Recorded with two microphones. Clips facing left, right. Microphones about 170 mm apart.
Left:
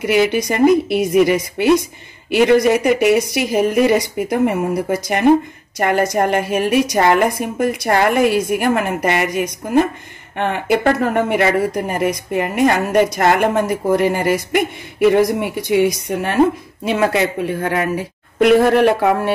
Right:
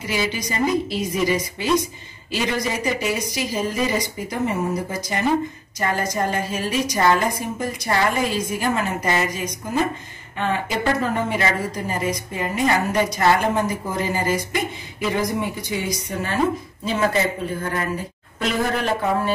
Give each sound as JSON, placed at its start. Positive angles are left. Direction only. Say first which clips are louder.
{"t": 0.0, "sound": "a man's voice", "louder": "left 10 dB", "side_deg": 65}